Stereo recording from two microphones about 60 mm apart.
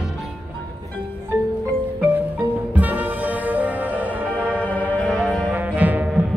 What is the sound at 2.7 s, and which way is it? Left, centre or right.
Music, right.